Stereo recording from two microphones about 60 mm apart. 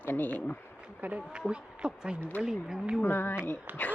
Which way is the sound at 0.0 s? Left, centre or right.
Left.